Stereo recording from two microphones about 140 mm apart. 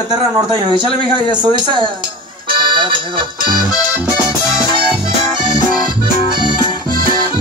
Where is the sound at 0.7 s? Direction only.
35° right (ahead or behind).